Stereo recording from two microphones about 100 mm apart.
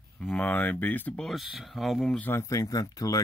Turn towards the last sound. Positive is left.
turn(degrees=35)  # may be behind; listen again after turning